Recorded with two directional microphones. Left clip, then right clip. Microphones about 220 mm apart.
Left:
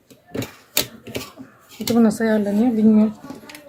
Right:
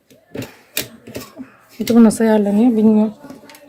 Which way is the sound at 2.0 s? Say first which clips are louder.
Right 5 dB; 40° right (ahead or behind).